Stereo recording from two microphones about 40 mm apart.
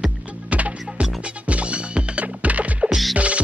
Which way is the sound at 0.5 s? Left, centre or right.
Right.